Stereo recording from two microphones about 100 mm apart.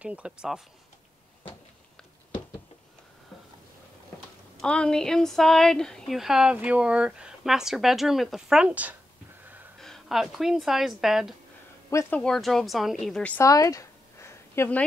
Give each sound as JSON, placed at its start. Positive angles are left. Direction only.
{"t": 0.0, "sound": "speech", "side_deg": -10}
{"t": 4.6, "sound": "a woman's voice", "side_deg": 10}
{"t": 9.8, "sound": "a woman's voice", "side_deg": 5}
{"t": 13.4, "sound": "a sound", "side_deg": 35}